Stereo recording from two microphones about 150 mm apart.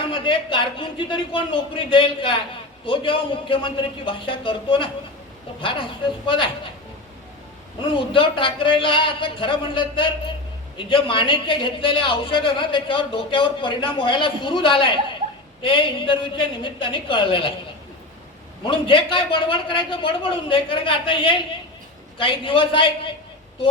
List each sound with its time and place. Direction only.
0.0 s a man's voice: 35° left (ahead or behind)
7.8 s a man's voice: 35° left (ahead or behind)
18.6 s a man's voice: 35° left (ahead or behind)